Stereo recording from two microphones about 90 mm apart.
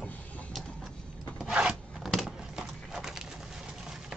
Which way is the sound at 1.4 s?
10° right (ahead or behind).